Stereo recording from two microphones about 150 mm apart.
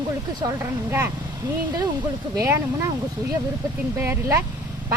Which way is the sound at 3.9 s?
15° right (ahead or behind).